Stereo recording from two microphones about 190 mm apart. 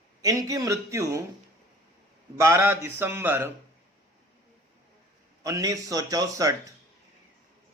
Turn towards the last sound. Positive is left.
turn(degrees=-20)  # may be behind; listen again after turning